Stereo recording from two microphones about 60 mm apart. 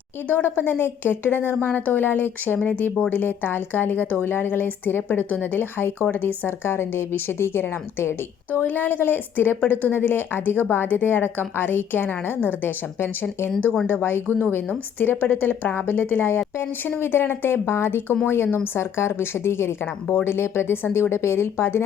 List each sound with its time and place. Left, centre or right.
0.3 s a woman's voice: left